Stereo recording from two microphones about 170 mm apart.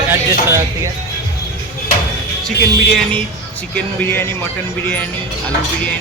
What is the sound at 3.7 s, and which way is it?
Music, 10° left (ahead or behind).